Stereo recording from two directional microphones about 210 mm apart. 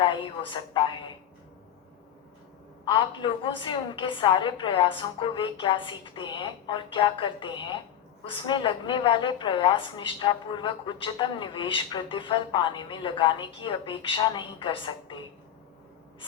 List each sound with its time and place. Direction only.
0.0 s a woman's voice: 20° left (ahead or behind)
2.8 s a woman's voice: 25° left (ahead or behind)